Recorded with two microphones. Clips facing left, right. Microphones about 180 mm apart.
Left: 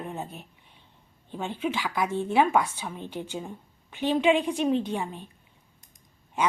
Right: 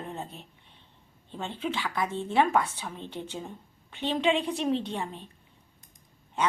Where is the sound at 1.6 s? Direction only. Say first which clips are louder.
Left 2 dB; 5° left (ahead or behind).